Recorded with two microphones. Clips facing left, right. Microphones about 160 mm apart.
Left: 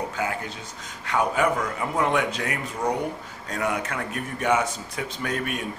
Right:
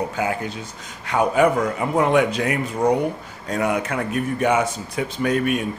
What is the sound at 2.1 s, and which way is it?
Speech, 10° right (ahead or behind).